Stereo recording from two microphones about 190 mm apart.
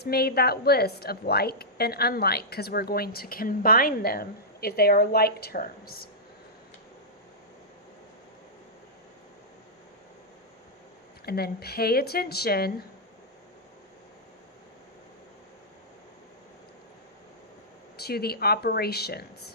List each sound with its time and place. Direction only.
0.0 s a woman's voice: 55° left (ahead or behind)
11.3 s a woman's voice: 55° left (ahead or behind)
17.9 s a woman's voice: 55° left (ahead or behind)